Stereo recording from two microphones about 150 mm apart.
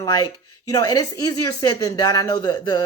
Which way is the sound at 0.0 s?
25° left (ahead or behind).